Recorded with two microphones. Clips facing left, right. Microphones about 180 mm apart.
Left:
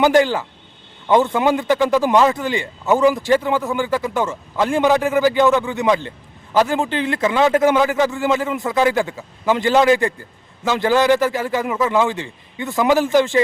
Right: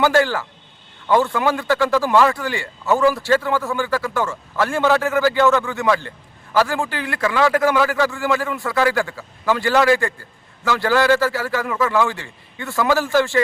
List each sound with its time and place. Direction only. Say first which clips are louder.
0.0 s a man's voice: left 2 dB; 20° left (ahead or behind)